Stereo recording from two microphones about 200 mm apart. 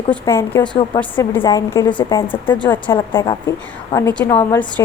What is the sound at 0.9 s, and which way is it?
A woman's voice, 10° left (ahead or behind).